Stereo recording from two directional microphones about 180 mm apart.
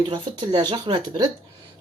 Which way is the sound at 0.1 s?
25° right (ahead or behind).